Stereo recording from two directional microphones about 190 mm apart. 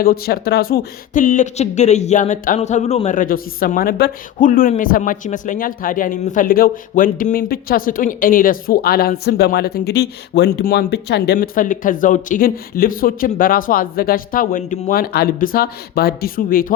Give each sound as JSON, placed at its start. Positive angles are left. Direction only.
{"t": 0.0, "sound": "speech", "side_deg": 50}
{"t": 11.3, "sound": "speech", "side_deg": 45}